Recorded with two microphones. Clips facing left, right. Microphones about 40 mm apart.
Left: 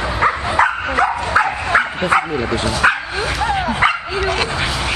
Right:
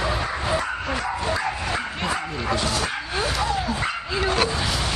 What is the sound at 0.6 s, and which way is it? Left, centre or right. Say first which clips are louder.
Dog: left 11 dB; left.